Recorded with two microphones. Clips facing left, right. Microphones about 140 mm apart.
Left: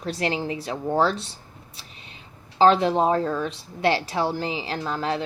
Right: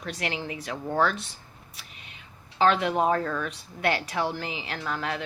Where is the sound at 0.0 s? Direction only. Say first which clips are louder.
Left 6 dB; 30° left (ahead or behind).